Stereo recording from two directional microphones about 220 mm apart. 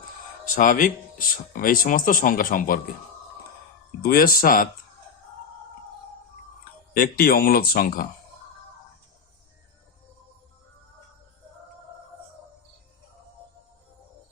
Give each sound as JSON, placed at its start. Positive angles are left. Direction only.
{"t": 0.5, "sound": "speech", "side_deg": 35}
{"t": 4.0, "sound": "speech", "side_deg": 40}
{"t": 6.9, "sound": "speech", "side_deg": 45}